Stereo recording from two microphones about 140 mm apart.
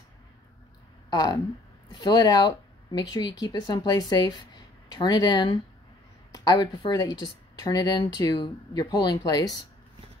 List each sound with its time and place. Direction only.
1.1 s speech: 25° left (ahead or behind)